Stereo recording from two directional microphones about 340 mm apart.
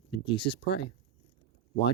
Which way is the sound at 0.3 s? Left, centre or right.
Centre.